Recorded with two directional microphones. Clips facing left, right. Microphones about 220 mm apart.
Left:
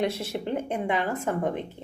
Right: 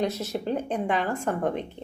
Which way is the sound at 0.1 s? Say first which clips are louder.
Right 1 dB; 30° left (ahead or behind).